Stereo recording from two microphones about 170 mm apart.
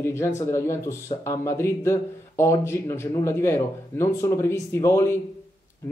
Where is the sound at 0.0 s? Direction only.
15° left (ahead or behind).